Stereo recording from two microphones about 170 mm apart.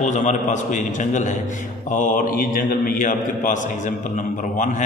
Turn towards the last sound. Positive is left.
turn(degrees=50)  # may be behind; listen again after turning